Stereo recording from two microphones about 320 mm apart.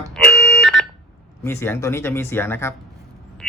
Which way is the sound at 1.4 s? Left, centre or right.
Centre.